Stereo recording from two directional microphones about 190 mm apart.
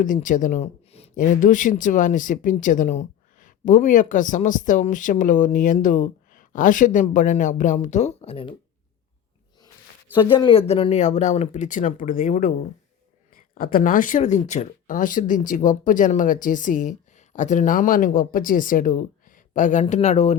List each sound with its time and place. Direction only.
0.0 s speech: 45° left (ahead or behind)
10.2 s speech: 25° left (ahead or behind)